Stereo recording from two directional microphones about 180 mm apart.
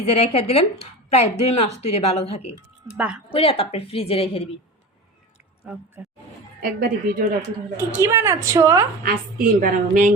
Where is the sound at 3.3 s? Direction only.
30° left (ahead or behind).